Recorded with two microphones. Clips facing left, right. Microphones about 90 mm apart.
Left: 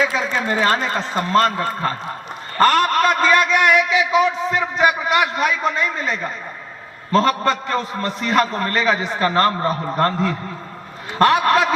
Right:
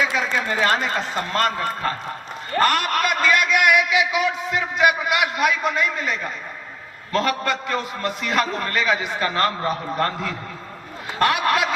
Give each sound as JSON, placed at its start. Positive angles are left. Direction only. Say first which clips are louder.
{"t": 0.2, "sound": "a man's voice", "louder": "left 2 dB", "side_deg": 30}
{"t": 2.6, "sound": "a sound", "louder": "left 5 dB", "side_deg": 35}
{"t": 4.1, "sound": "a man's voice", "louder": "left 5 dB", "side_deg": 35}